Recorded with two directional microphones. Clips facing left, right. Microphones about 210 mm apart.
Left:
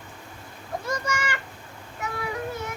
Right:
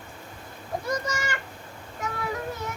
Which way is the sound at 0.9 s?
35° right (ahead or behind).